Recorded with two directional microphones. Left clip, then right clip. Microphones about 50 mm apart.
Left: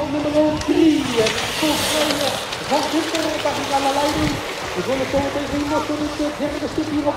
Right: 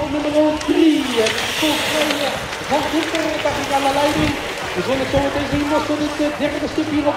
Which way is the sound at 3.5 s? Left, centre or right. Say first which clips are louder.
Right 2 dB; right.